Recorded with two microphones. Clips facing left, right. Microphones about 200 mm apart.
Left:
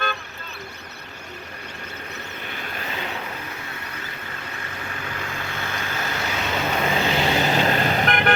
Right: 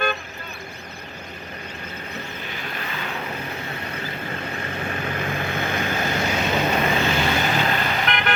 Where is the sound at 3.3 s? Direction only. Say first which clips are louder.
Right 4 dB; 25° right (ahead or behind).